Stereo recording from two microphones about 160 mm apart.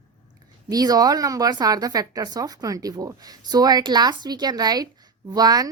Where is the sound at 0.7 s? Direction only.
25° right (ahead or behind).